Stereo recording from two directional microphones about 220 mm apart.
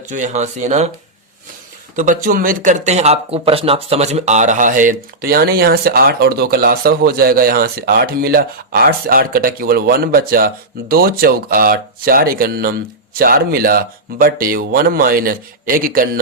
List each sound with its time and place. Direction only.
0.0 s speech: 35° right (ahead or behind)
2.0 s speech: 40° right (ahead or behind)